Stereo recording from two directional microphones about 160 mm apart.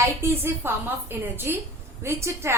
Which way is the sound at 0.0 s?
15° right (ahead or behind).